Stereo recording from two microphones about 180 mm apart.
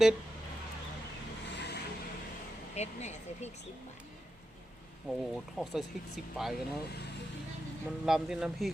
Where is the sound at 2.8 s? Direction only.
40° left (ahead or behind).